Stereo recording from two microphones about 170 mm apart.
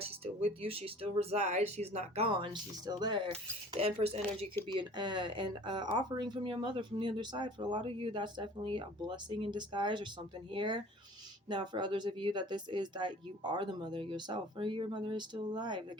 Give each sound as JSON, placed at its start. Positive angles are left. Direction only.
{"t": 0.0, "sound": "speech", "side_deg": -35}